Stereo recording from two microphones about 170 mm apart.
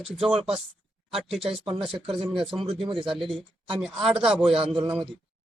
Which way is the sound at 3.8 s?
5° right (ahead or behind).